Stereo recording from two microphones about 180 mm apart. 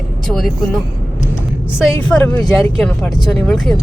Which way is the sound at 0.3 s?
Centre (ahead or behind).